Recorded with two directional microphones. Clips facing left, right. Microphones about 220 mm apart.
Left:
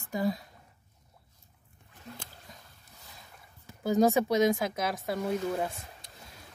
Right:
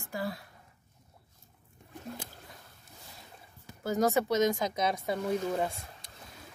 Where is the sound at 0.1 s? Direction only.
20° left (ahead or behind).